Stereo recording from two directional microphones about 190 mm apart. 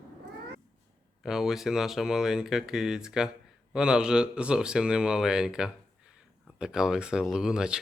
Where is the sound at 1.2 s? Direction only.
Centre (ahead or behind).